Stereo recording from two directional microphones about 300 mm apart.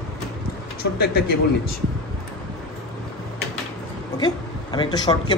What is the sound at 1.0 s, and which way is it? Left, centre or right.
Speech, left.